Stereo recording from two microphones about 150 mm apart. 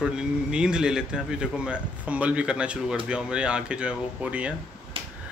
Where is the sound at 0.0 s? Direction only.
5° right (ahead or behind).